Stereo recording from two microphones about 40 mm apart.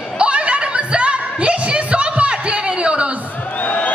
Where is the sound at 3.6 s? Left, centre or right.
Left.